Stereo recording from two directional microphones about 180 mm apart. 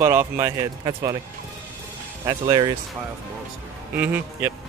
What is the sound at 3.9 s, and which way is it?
Speech, 10° right (ahead or behind).